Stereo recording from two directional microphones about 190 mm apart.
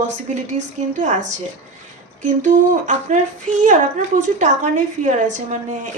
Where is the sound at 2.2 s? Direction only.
40° right (ahead or behind).